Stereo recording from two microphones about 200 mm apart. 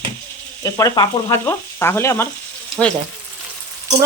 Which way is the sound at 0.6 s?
15° left (ahead or behind).